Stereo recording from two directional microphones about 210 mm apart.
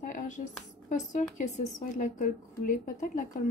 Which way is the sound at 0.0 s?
40° left (ahead or behind).